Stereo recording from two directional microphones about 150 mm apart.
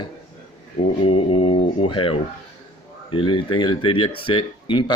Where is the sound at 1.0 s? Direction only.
35° left (ahead or behind).